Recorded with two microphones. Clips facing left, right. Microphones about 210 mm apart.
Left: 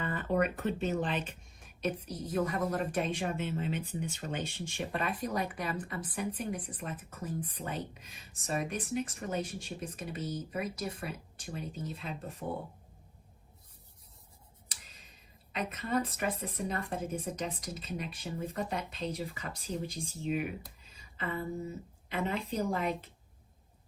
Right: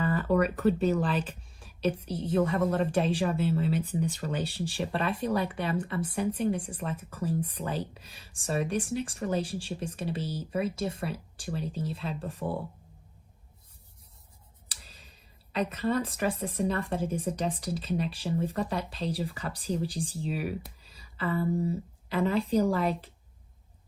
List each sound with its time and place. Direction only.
0.0 s speech: 35° right (ahead or behind)
14.7 s a sound: 30° right (ahead or behind)
16.6 s speech: 30° right (ahead or behind)